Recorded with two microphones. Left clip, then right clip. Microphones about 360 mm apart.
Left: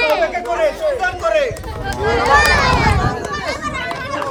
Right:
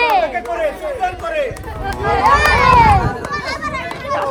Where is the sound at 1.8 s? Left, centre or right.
Centre.